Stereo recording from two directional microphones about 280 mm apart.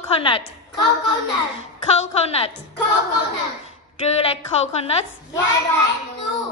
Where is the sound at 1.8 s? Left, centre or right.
Left.